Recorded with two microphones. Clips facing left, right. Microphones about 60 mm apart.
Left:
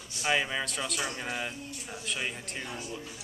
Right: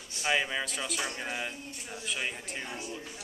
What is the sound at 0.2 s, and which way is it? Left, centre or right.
Speech, centre.